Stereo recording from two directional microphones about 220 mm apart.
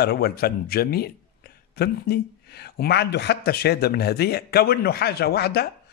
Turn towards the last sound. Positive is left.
turn(degrees=45)  # may be behind; listen again after turning